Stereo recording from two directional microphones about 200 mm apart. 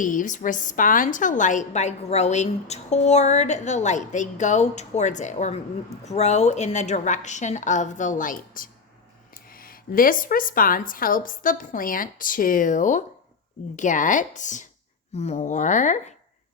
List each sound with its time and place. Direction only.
0.0 s a woman's voice: 40° left (ahead or behind)